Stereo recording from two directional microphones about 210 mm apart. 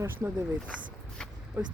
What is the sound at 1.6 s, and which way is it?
Speech, 10° right (ahead or behind).